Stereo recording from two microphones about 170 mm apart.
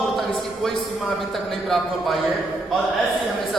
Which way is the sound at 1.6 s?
Centre (ahead or behind).